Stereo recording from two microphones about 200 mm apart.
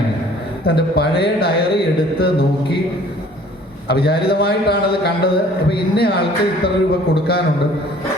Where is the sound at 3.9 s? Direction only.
50° left (ahead or behind).